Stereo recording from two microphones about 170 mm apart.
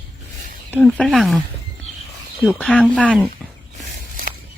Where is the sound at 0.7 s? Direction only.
5° left (ahead or behind).